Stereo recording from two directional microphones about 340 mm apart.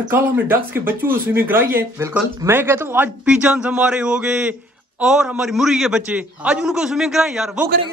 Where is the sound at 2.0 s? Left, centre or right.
Centre.